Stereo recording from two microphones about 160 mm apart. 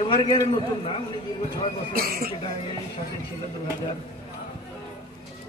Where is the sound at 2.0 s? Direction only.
65° right (ahead or behind).